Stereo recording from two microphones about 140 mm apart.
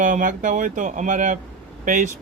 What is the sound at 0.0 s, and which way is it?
Speech, 70° right (ahead or behind).